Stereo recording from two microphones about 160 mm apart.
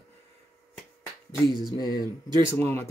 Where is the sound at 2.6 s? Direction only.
15° left (ahead or behind).